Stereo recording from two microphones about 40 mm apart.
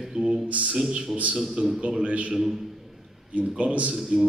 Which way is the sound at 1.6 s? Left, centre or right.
Right.